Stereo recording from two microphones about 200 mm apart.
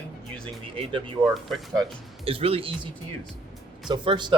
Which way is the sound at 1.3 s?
Centre (ahead or behind).